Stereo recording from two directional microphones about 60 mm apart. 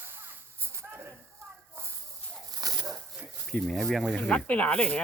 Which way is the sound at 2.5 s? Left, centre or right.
Right.